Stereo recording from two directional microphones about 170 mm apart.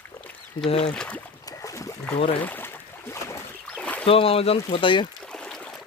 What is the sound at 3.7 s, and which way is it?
Rowboat, 5° left (ahead or behind).